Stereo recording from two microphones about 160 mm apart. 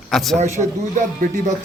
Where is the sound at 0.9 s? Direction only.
50° right (ahead or behind).